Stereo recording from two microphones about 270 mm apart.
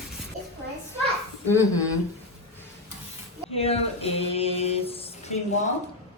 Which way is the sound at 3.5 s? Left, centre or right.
Left.